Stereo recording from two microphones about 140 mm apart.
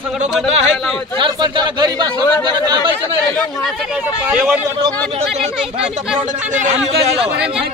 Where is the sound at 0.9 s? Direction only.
35° right (ahead or behind).